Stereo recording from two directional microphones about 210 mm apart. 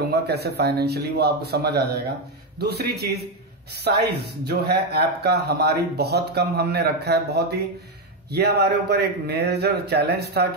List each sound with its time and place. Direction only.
0.0 s speech: 50° right (ahead or behind)